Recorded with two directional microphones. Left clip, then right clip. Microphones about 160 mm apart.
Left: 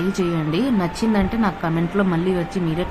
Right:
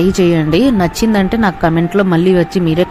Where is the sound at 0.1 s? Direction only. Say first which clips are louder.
Right 10 dB; 50° right (ahead or behind).